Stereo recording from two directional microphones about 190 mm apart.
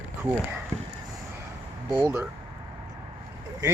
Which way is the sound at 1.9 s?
10° right (ahead or behind).